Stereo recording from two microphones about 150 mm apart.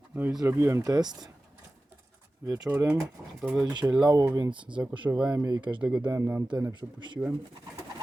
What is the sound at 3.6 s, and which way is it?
Speech, 25° right (ahead or behind).